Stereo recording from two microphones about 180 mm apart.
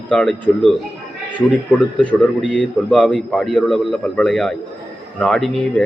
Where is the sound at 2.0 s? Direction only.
5° left (ahead or behind).